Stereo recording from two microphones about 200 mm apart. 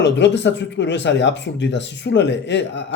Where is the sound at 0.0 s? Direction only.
60° left (ahead or behind).